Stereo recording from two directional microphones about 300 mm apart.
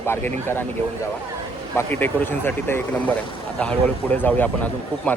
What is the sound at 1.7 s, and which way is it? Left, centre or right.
A man's voice, centre.